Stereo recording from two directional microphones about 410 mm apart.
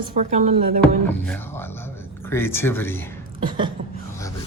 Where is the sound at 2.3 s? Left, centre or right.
Centre.